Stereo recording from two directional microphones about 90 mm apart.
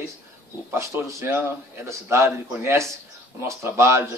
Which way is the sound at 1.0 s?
25° right (ahead or behind).